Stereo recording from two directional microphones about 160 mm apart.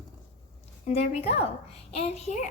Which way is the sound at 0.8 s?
40° left (ahead or behind).